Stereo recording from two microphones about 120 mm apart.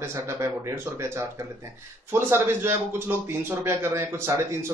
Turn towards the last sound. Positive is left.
turn(degrees=-20)  # may be behind; listen again after turning